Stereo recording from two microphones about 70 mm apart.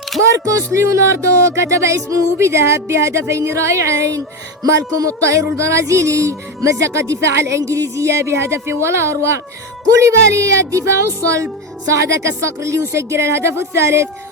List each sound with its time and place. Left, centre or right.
0.1 s single-lens reflex camera: centre
0.5 s music: right